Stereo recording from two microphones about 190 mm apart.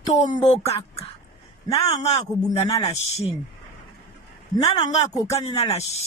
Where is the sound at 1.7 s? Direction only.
35° left (ahead or behind).